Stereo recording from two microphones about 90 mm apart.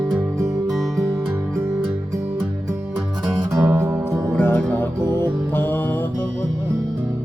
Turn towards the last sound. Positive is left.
turn(degrees=25)  # may be behind; listen again after turning